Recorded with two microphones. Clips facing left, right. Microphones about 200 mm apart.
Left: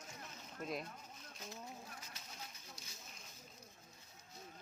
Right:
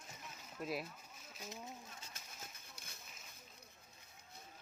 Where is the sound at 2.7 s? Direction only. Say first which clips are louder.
Left 1 dB; 60° right (ahead or behind).